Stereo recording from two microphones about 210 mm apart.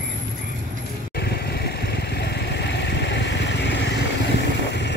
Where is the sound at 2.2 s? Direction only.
55° left (ahead or behind).